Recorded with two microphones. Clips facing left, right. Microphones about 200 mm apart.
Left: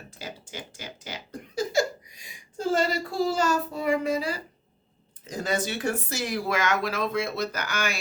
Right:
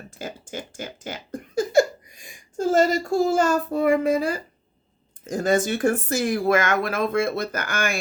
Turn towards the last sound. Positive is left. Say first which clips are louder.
# right 3 dB
turn(degrees=-50)  # may be behind; listen again after turning